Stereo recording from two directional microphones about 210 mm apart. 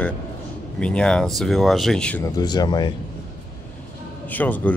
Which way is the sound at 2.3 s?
20° left (ahead or behind).